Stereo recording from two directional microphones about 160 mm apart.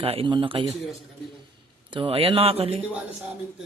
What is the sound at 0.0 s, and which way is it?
Speech, 35° right (ahead or behind).